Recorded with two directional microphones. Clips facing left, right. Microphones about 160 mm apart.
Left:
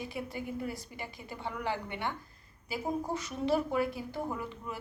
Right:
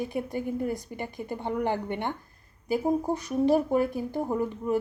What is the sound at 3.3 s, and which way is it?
A woman's voice, 45° right (ahead or behind).